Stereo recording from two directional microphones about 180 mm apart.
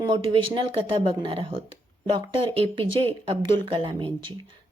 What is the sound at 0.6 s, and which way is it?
A woman's voice, 30° right (ahead or behind).